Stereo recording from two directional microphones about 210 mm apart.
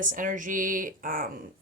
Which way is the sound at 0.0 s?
40° right (ahead or behind).